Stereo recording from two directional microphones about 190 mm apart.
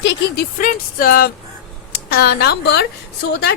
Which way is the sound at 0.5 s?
45° left (ahead or behind).